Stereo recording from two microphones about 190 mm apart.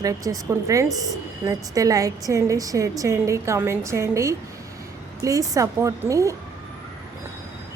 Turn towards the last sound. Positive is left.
turn(degrees=-15)  # may be behind; listen again after turning